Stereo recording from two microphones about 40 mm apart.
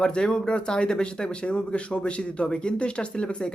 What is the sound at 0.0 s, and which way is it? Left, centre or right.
Speech, left.